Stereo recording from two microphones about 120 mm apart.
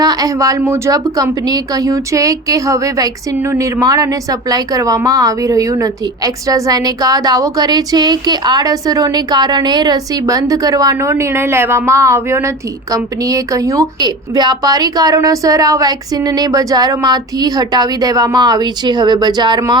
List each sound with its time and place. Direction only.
0.0 s a woman's voice: 30° right (ahead or behind)